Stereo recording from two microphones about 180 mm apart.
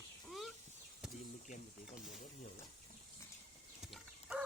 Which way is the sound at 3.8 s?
5° right (ahead or behind).